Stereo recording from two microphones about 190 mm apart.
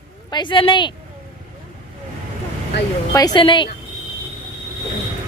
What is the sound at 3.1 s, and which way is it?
Speech, 20° left (ahead or behind).